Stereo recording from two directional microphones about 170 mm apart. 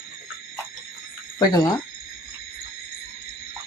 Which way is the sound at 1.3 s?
25° left (ahead or behind).